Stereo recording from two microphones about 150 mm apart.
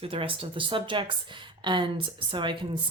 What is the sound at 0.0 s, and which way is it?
A woman's voice, 35° right (ahead or behind).